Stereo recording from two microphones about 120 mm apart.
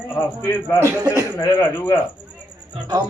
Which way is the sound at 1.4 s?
25° left (ahead or behind).